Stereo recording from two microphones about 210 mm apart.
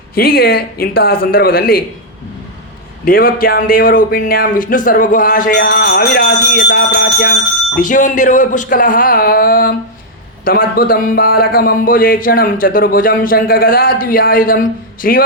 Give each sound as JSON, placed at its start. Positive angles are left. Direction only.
{"t": 0.1, "sound": "a man's voice", "side_deg": 45}
{"t": 3.0, "sound": "a man's voice", "side_deg": 45}
{"t": 7.8, "sound": "a man's voice", "side_deg": 40}